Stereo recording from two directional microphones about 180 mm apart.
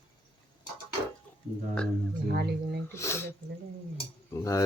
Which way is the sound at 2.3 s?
65° right (ahead or behind).